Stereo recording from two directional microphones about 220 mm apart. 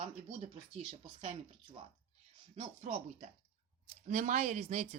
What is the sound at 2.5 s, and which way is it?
Speech, 30° right (ahead or behind).